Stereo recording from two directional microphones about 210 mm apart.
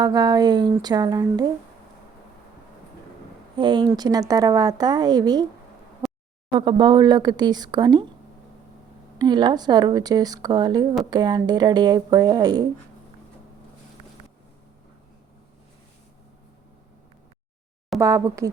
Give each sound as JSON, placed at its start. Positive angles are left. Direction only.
{"t": 0.0, "sound": "speech", "side_deg": -20}
{"t": 3.6, "sound": "speech", "side_deg": -20}
{"t": 6.0, "sound": "a sound", "side_deg": 0}
{"t": 6.5, "sound": "speech", "side_deg": -25}
{"t": 9.1, "sound": "speech", "side_deg": -20}
{"t": 18.0, "sound": "speech", "side_deg": -15}